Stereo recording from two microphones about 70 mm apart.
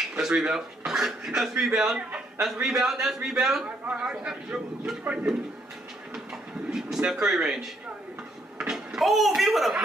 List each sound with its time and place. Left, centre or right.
0.2 s speech: centre
3.8 s speech: right
4.1 s speech: centre
6.7 s speech: centre